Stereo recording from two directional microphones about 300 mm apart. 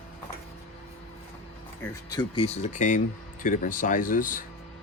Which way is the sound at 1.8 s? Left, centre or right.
Centre.